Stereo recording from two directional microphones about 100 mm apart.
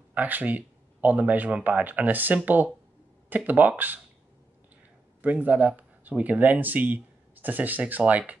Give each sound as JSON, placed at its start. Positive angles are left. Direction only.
{"t": 0.1, "sound": "speech", "side_deg": -15}
{"t": 5.2, "sound": "speech", "side_deg": -15}